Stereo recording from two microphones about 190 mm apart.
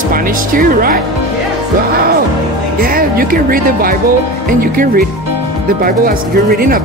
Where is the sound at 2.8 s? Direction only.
50° right (ahead or behind).